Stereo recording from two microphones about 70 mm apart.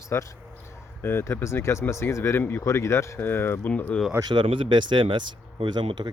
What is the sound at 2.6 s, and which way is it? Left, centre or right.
Speech, left.